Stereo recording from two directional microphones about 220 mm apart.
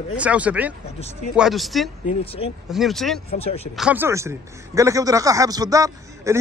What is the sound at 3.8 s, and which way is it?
Speech, 5° right (ahead or behind).